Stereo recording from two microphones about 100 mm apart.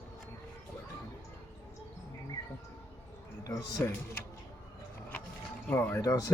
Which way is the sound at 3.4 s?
35° left (ahead or behind).